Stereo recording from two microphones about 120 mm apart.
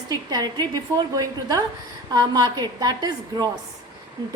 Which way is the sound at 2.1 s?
35° right (ahead or behind).